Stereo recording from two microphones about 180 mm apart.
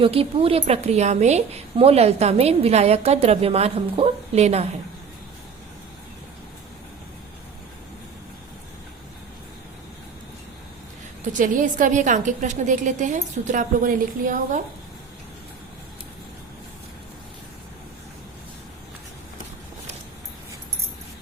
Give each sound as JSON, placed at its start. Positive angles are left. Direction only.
{"t": 0.0, "sound": "speech", "side_deg": -30}
{"t": 11.3, "sound": "a woman's voice", "side_deg": -45}